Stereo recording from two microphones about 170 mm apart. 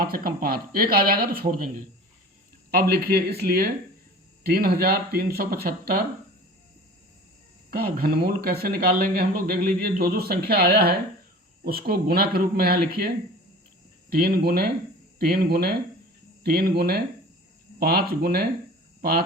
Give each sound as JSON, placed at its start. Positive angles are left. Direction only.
{"t": 0.0, "sound": "speech", "side_deg": -60}
{"t": 2.6, "sound": "speech", "side_deg": -65}
{"t": 7.7, "sound": "speech", "side_deg": -65}
{"t": 14.1, "sound": "speech", "side_deg": -65}